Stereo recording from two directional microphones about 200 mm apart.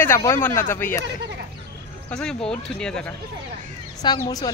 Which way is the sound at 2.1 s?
5° left (ahead or behind).